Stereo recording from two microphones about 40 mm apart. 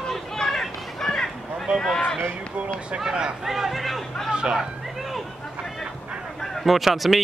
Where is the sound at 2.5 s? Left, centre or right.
Right.